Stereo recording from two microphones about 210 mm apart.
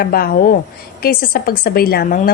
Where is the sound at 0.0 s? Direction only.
45° left (ahead or behind).